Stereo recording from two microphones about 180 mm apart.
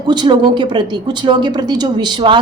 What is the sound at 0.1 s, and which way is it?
A woman's voice, 25° right (ahead or behind).